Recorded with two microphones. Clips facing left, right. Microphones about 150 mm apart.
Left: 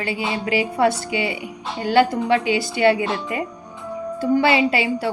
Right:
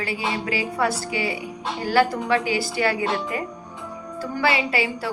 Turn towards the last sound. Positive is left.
turn(degrees=25)  # may be behind; listen again after turning